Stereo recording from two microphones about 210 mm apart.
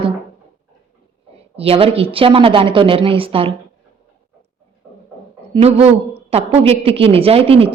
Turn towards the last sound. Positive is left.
turn(degrees=-25)  # may be behind; listen again after turning